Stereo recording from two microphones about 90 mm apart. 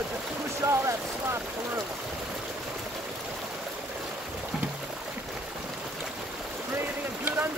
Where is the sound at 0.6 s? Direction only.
30° right (ahead or behind).